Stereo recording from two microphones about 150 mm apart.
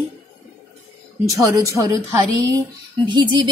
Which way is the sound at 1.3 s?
20° right (ahead or behind).